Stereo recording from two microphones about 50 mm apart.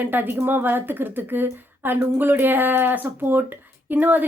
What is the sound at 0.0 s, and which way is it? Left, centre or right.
A woman's voice, right.